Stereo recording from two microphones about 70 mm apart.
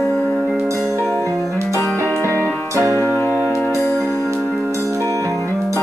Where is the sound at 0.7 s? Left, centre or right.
Right.